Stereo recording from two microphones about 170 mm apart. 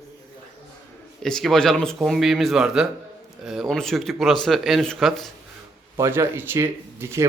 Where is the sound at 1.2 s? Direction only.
5° left (ahead or behind).